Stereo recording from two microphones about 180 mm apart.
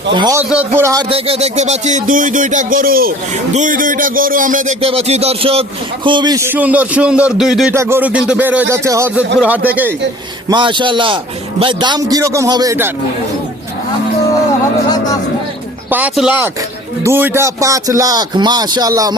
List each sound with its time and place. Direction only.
0.1 s speech: 25° right (ahead or behind)
0.3 s speech: 10° right (ahead or behind)
1.1 s speech: 35° right (ahead or behind); by 7.7 s centre (ahead or behind)
7.7 s speech: 15° right (ahead or behind)
10.5 s speech: 25° right (ahead or behind)
14.8 s speech: 20° left (ahead or behind)
15.9 s speech: 10° right (ahead or behind)